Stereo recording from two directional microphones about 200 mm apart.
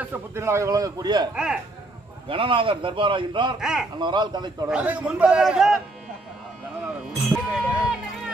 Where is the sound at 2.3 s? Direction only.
25° right (ahead or behind).